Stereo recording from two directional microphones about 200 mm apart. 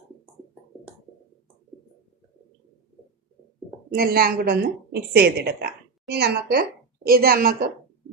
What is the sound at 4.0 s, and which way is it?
A woman's voice, 50° right (ahead or behind).